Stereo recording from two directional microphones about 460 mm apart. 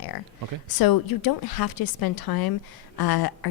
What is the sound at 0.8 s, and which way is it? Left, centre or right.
A woman's voice, left.